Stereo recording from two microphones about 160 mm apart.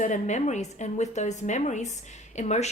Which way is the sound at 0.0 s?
50° left (ahead or behind).